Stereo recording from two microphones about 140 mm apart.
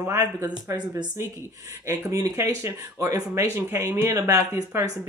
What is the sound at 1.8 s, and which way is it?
Speech, 25° right (ahead or behind).